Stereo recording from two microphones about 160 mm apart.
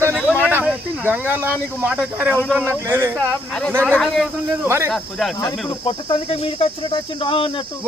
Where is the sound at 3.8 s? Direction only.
5° left (ahead or behind).